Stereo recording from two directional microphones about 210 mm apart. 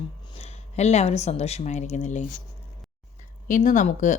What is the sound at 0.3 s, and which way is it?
Speech, 30° left (ahead or behind).